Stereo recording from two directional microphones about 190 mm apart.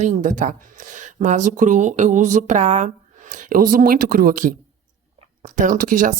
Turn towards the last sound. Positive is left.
turn(degrees=-45)  # may be behind; listen again after turning